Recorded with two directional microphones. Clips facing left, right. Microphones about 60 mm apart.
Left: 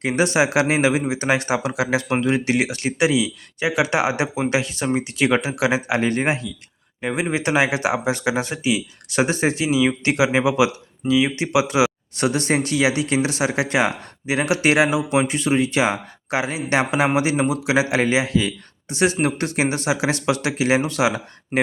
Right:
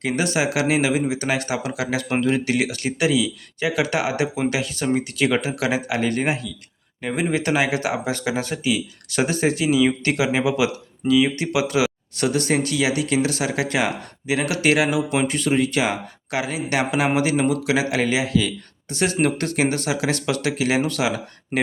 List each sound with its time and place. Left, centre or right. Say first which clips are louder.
0.0 s speech: left 3 dB; left